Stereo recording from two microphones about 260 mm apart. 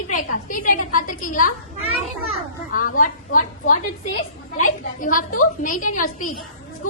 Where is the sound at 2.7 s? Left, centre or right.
Left.